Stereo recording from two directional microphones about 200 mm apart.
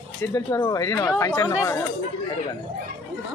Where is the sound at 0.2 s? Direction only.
15° left (ahead or behind).